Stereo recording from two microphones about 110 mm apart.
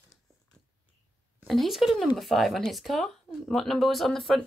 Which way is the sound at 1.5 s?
Centre (ahead or behind).